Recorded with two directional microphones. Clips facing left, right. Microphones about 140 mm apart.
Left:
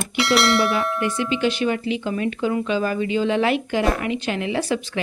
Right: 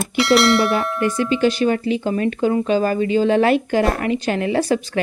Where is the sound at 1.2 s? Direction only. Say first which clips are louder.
Right 5 dB; 40° right (ahead or behind).